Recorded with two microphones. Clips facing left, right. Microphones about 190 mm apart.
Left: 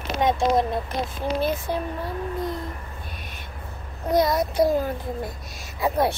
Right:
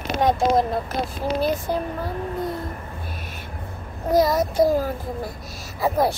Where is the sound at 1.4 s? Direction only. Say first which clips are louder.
Right 3 dB; centre (ahead or behind).